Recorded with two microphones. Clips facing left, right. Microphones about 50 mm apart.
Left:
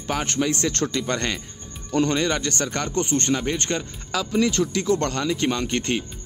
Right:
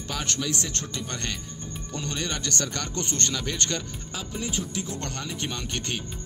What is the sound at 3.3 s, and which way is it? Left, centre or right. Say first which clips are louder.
Speech: left 6 dB; left.